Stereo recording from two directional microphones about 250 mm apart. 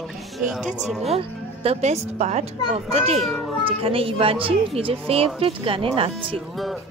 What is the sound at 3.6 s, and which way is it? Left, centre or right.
Speech, right.